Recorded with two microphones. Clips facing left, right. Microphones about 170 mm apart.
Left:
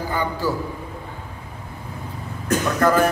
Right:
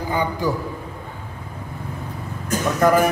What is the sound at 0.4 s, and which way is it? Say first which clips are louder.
Speech: even; 15° right (ahead or behind).